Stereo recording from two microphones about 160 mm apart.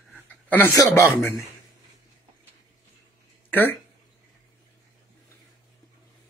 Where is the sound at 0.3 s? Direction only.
10° left (ahead or behind).